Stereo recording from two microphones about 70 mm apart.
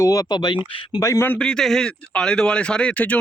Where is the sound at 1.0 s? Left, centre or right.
Left.